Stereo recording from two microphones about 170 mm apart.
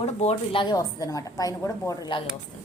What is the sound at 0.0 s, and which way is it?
A woman's voice, 40° left (ahead or behind).